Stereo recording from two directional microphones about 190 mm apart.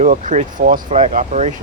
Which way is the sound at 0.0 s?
40° right (ahead or behind).